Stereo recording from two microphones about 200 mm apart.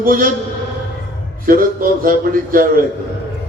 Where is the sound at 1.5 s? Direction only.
45° right (ahead or behind).